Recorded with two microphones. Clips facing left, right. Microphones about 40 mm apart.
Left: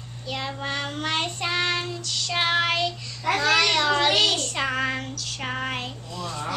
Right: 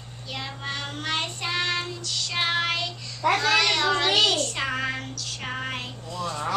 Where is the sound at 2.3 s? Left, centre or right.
Centre.